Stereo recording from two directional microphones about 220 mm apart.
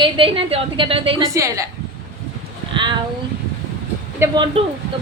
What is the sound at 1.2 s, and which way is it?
Speech, 15° right (ahead or behind).